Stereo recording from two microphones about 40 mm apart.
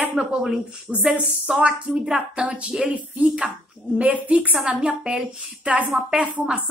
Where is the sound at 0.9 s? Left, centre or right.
Centre.